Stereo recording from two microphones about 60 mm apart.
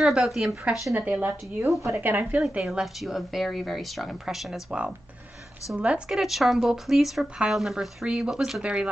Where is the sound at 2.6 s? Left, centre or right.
Centre.